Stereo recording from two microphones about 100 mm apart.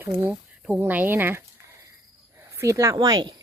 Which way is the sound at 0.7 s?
20° right (ahead or behind).